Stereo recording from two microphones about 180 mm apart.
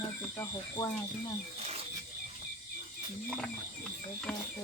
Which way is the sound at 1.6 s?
35° right (ahead or behind).